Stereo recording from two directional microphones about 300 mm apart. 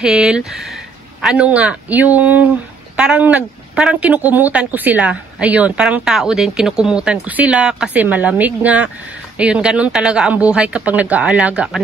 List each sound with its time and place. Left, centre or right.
0.0 s speech: centre